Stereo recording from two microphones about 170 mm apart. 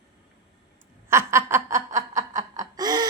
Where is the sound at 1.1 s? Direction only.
15° right (ahead or behind).